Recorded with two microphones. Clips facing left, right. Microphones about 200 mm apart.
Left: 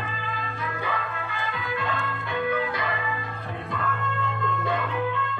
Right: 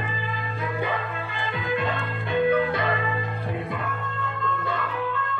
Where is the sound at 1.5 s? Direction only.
20° right (ahead or behind).